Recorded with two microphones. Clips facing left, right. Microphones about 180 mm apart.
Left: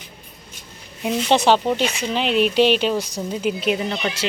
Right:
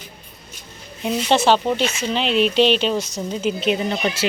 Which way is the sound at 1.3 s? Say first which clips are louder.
Even; 15° left (ahead or behind).